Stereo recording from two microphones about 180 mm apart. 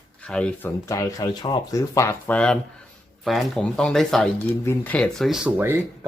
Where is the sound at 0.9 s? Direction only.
20° left (ahead or behind).